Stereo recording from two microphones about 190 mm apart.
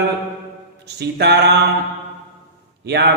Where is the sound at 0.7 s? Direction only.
60° right (ahead or behind).